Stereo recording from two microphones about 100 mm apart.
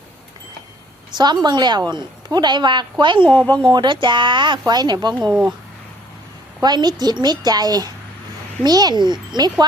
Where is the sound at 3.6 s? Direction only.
50° right (ahead or behind).